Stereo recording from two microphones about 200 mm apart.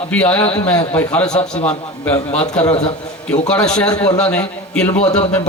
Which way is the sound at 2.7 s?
20° left (ahead or behind).